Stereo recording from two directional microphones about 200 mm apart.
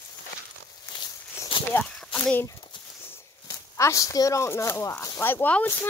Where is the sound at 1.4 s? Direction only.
25° left (ahead or behind).